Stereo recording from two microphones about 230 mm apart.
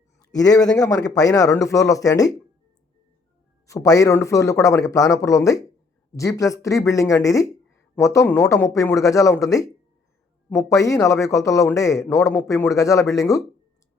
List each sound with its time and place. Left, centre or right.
0.3 s a man's voice: centre
3.7 s a man's voice: centre